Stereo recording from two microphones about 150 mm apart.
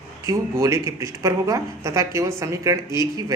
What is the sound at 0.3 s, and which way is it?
Speech, 20° right (ahead or behind).